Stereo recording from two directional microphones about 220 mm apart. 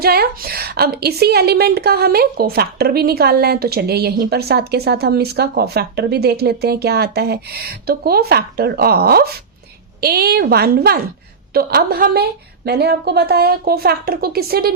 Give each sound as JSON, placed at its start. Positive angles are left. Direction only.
{"t": 0.0, "sound": "a woman's voice", "side_deg": -45}